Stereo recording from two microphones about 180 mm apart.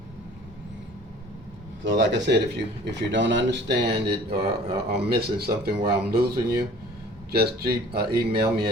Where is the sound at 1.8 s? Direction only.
80° right.